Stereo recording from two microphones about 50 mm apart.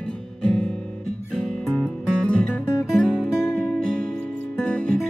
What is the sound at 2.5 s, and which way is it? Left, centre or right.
Music, left.